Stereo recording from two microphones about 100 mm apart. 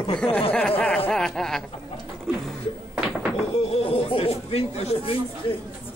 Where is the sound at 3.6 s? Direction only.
80° left.